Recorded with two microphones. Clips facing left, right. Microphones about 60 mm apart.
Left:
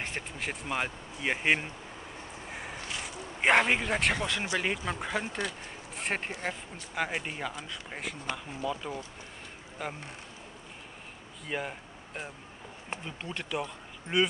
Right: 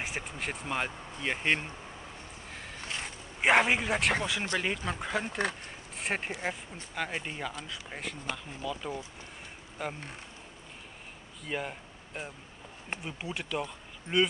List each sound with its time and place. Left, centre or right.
0.0 s speech: centre
2.5 s a sound: centre
3.0 s a sound: centre
4.2 s speech: centre
7.0 s speech: centre
8.6 s speech: centre
9.8 s speech: centre
11.4 s speech: centre